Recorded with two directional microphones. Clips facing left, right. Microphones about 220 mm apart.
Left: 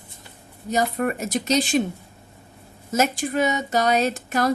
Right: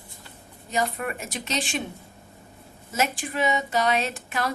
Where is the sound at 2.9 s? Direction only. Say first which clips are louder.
Left 5 dB; 40° left (ahead or behind).